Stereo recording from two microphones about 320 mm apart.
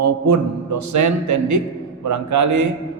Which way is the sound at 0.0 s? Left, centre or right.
Right.